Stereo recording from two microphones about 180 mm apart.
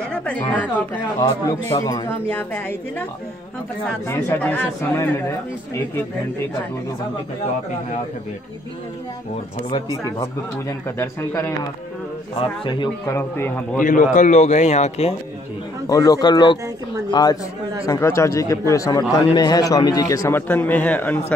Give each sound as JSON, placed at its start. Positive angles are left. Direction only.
{"t": 0.1, "sound": "a sound", "side_deg": 5}
{"t": 0.5, "sound": "speech", "side_deg": 10}
{"t": 1.8, "sound": "speech", "side_deg": 20}
{"t": 2.2, "sound": "speech", "side_deg": 10}
{"t": 11.0, "sound": "speech", "side_deg": 15}
{"t": 12.4, "sound": "speech", "side_deg": 25}
{"t": 13.2, "sound": "speech", "side_deg": 10}
{"t": 13.7, "sound": "a man's voice", "side_deg": 45}
{"t": 15.9, "sound": "speech", "side_deg": 20}